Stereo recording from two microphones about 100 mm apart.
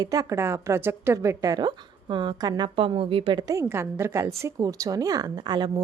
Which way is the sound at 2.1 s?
50° right (ahead or behind).